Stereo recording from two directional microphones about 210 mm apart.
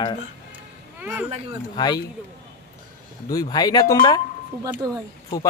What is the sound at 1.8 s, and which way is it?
Speech, 20° left (ahead or behind).